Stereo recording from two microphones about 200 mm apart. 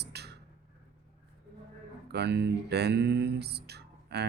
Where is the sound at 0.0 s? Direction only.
55° right (ahead or behind).